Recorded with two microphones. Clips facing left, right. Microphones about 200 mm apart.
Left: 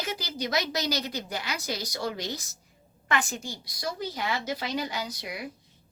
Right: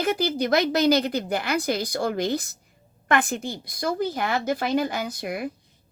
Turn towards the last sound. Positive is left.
turn(degrees=-50)  # may be behind; listen again after turning